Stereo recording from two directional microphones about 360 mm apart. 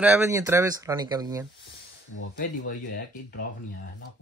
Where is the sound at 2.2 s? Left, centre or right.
Left.